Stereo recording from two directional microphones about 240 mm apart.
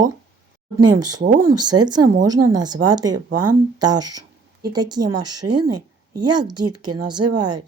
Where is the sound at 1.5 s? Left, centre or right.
Centre.